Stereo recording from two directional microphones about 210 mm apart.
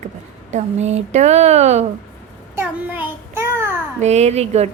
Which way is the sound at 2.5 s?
10° right (ahead or behind).